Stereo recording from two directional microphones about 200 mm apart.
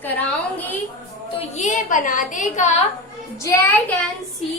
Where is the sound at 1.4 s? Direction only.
35° left (ahead or behind).